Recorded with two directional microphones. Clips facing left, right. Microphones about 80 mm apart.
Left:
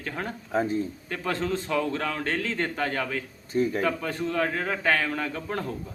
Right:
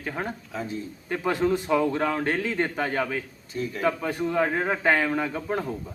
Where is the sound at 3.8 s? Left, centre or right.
Centre.